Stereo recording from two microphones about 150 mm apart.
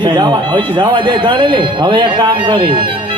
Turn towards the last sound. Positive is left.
turn(degrees=-30)  # may be behind; listen again after turning